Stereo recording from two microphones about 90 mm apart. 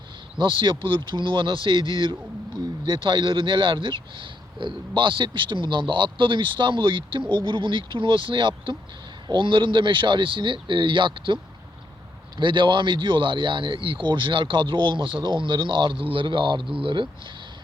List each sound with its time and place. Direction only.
0.3 s speech: 65° right (ahead or behind)
12.4 s speech: 60° right (ahead or behind)